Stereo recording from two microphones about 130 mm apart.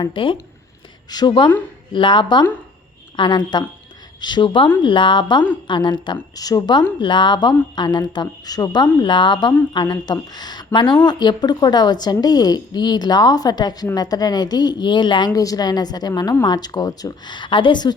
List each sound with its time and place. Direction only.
0.0 s a woman's voice: 40° left (ahead or behind)